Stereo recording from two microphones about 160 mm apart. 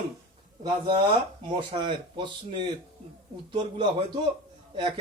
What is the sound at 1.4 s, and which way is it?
Speech, 35° right (ahead or behind).